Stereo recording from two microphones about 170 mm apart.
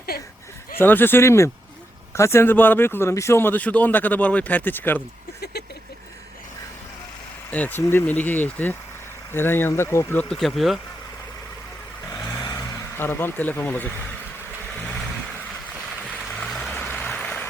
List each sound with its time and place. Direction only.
0.8 s speech: 10° left (ahead or behind)
7.5 s speech: 10° left (ahead or behind)
12.1 s vehicle: 20° left (ahead or behind)
13.0 s speech: 15° left (ahead or behind)
16.3 s vehicle: 5° left (ahead or behind)
16.7 s music: 10° left (ahead or behind)